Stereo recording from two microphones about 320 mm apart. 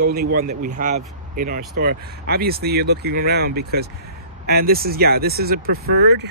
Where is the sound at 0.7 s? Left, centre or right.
Right.